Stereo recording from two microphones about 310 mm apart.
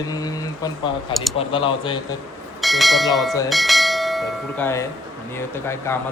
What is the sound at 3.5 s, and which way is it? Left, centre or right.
Bell, centre.